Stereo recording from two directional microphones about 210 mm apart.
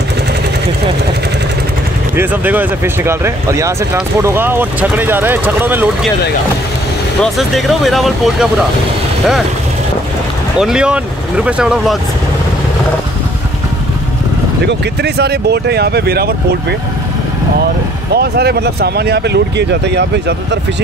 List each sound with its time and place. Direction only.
2.1 s speech: 10° right (ahead or behind)
7.3 s speech: centre (ahead or behind)
10.6 s speech: 5° right (ahead or behind)
14.7 s speech: 50° right (ahead or behind)
18.1 s speech: 50° right (ahead or behind)